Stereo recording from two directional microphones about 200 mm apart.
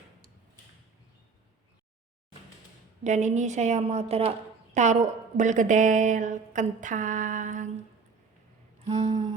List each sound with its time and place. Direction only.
3.0 s speech: 35° right (ahead or behind)
8.8 s humming: 35° right (ahead or behind)